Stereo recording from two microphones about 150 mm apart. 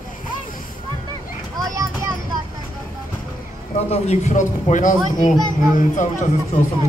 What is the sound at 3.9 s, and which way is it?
A man's voice, 50° left (ahead or behind).